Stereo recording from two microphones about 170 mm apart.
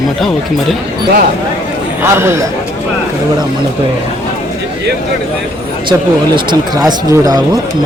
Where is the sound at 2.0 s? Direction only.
15° right (ahead or behind).